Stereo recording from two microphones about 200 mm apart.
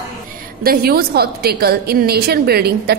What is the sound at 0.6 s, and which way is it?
A woman's voice, 50° right (ahead or behind).